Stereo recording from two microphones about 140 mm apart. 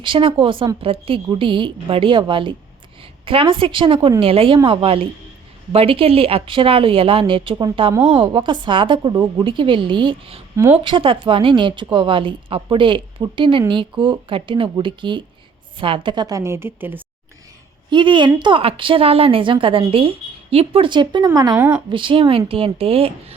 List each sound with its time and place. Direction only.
0.0 s a woman's voice: 40° right (ahead or behind); by 17.0 s 15° right (ahead or behind)
17.9 s speech: 35° right (ahead or behind)
21.5 s speech: 15° right (ahead or behind)
21.8 s speech: 35° right (ahead or behind)